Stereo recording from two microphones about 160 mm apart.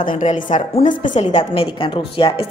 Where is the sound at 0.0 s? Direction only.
55° left (ahead or behind).